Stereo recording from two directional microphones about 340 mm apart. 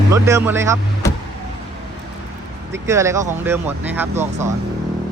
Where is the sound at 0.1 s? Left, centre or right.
Centre.